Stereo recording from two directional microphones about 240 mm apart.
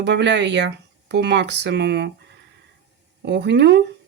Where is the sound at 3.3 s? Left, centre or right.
Right.